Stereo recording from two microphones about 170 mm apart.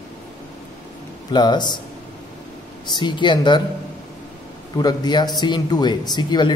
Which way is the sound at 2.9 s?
25° left (ahead or behind).